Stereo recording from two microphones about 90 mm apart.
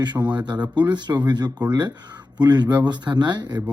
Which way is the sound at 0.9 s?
55° right (ahead or behind).